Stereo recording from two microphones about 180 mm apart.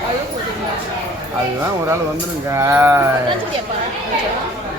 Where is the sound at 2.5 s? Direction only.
15° right (ahead or behind).